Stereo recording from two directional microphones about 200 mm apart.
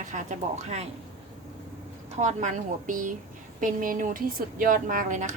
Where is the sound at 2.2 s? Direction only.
35° right (ahead or behind).